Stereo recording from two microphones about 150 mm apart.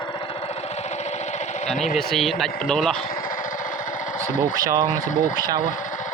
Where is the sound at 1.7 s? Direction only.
Centre (ahead or behind).